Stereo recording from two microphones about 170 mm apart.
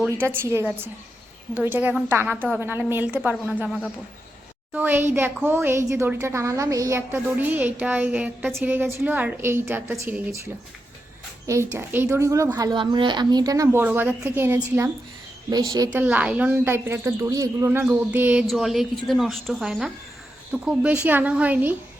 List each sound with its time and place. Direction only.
0.0 s a woman's voice: 10° right (ahead or behind)
11.4 s a woman's voice: 15° right (ahead or behind)
15.9 s a woman's voice: 10° right (ahead or behind)